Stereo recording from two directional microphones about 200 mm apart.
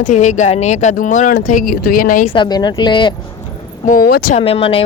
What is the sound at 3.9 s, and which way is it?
Speech, 45° left (ahead or behind).